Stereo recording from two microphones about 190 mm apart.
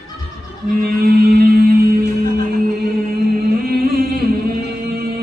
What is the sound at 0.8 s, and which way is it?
Music, 55° right (ahead or behind).